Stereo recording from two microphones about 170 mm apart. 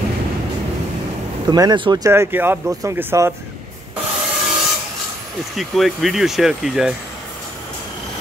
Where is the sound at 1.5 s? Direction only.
25° right (ahead or behind).